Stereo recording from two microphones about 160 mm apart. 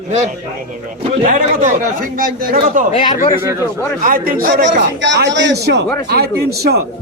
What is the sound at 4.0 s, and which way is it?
A man's voice, 60° right (ahead or behind).